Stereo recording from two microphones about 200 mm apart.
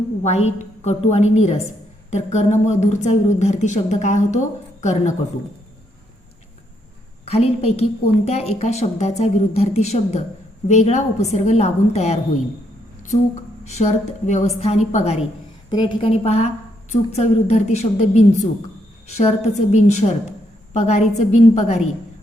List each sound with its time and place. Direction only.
0.2 s speech: 35° left (ahead or behind)
7.3 s speech: 30° left (ahead or behind)
13.7 s a woman's voice: 35° left (ahead or behind)